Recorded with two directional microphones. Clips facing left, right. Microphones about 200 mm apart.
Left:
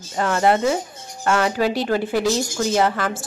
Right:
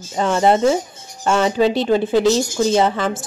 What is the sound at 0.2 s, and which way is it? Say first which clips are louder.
Speech: right 3 dB; 20° right (ahead or behind).